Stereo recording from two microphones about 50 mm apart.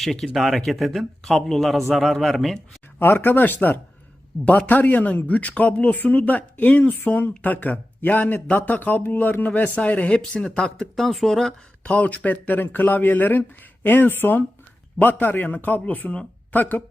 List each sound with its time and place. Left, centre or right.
0.0 s speech: centre
3.0 s speech: left
10.4 s speech: centre
11.8 s speech: left